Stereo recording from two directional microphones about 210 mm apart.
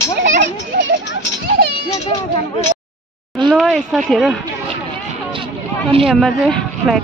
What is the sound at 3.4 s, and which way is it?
Speech, centre (ahead or behind).